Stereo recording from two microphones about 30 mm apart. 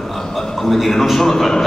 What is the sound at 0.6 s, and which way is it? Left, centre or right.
A man's voice, centre.